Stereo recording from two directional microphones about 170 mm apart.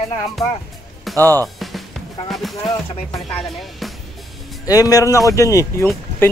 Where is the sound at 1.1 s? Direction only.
Centre (ahead or behind).